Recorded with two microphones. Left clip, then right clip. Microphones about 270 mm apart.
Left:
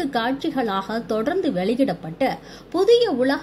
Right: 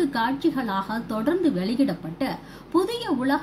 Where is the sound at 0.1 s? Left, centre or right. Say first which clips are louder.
Left 1 dB; centre.